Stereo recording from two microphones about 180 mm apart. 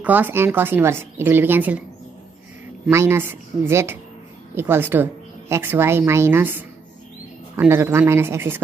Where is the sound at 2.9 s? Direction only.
15° right (ahead or behind).